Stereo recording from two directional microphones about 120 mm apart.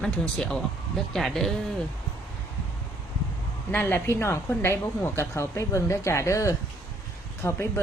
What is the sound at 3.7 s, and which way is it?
A woman's voice, 15° left (ahead or behind).